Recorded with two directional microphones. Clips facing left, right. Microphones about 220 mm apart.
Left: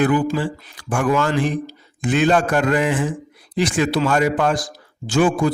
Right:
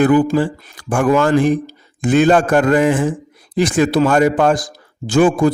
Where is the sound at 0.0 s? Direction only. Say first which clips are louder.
Right 5 dB; 40° right (ahead or behind).